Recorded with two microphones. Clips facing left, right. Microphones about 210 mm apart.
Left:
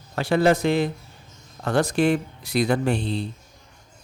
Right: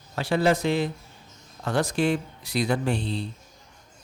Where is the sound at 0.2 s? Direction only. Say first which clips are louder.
Left 3 dB; 50° left (ahead or behind).